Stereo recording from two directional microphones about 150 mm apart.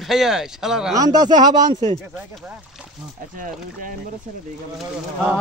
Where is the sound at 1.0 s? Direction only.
25° right (ahead or behind).